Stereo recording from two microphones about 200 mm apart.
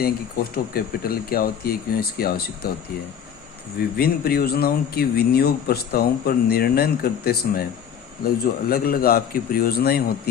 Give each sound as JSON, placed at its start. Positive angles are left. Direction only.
{"t": 0.5, "sound": "speech", "side_deg": 50}
{"t": 3.8, "sound": "speech", "side_deg": 50}